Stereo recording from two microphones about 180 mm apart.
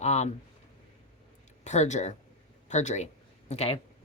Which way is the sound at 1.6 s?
40° left (ahead or behind).